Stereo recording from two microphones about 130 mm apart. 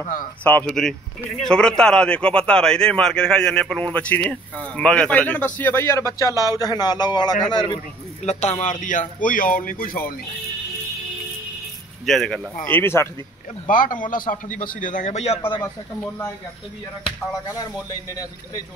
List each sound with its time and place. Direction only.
0.4 s a man's voice: 15° left (ahead or behind); by 7.8 s 35° left (ahead or behind)
8.2 s speech: 60° left (ahead or behind); by 10.1 s 90° left
12.1 s speech: centre (ahead or behind)
12.6 s a man's voice: 15° left (ahead or behind)
13.7 s a man's voice: 90° left; by 15.6 s 45° left (ahead or behind)